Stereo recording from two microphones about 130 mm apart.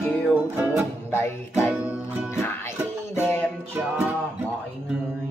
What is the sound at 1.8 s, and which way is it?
Music, 10° right (ahead or behind).